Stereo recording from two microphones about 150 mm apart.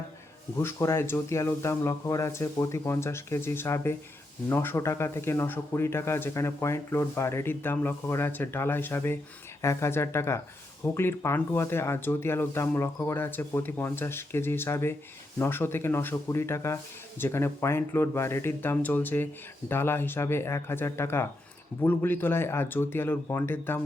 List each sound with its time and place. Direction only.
0.6 s speech: 20° left (ahead or behind)